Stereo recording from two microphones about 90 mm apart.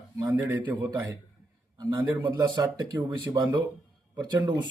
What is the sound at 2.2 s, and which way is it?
Speech, 45° right (ahead or behind).